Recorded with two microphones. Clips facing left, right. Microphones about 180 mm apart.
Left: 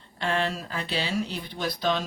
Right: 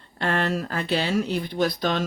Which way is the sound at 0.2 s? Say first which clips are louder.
Right 3 dB; 50° right (ahead or behind).